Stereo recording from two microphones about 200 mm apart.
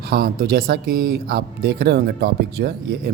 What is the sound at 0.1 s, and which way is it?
Speech, 50° right (ahead or behind).